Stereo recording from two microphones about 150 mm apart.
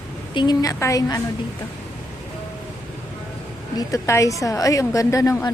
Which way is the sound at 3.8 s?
20° left (ahead or behind).